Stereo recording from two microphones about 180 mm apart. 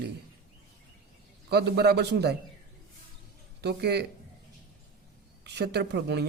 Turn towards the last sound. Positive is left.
turn(degrees=-65)  # may be behind; listen again after turning